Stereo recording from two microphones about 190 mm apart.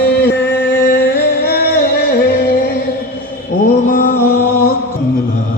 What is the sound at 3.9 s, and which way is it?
Music, 50° left (ahead or behind).